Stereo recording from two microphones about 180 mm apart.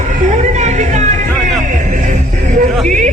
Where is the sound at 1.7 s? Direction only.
45° right (ahead or behind).